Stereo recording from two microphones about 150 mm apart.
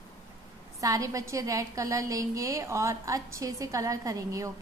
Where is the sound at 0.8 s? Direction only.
20° right (ahead or behind).